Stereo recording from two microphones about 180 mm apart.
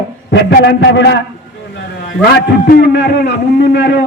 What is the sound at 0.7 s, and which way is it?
Speech, 75° left (ahead or behind).